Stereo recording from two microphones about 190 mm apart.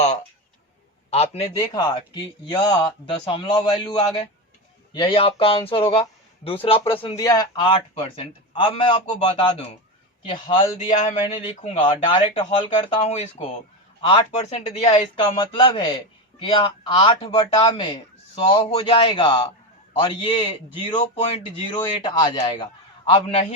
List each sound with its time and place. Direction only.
0.0 s a sound: 40° left (ahead or behind)
1.1 s speech: 30° left (ahead or behind)
1.5 s speech: 20° left (ahead or behind)
10.8 s speech: 35° left (ahead or behind)
21.5 s speech: 25° left (ahead or behind)